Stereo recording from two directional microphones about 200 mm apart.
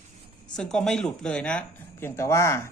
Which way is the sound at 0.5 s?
5° left (ahead or behind).